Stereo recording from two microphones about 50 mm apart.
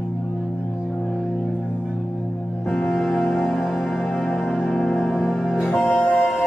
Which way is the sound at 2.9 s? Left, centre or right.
Centre.